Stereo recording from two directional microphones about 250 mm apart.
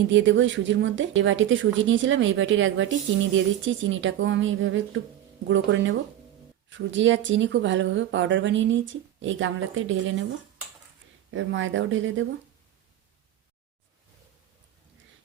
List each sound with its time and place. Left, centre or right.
0.1 s a woman's voice: right
11.3 s a woman's voice: right